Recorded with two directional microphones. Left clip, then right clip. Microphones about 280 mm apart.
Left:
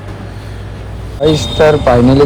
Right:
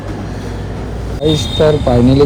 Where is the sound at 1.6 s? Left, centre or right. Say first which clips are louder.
Left 4 dB; centre.